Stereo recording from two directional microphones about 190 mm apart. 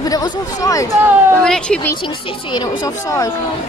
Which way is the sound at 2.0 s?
25° left (ahead or behind).